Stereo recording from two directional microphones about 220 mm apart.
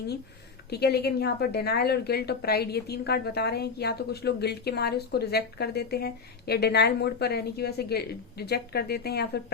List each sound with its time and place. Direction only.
0.7 s a woman's voice: 45° left (ahead or behind)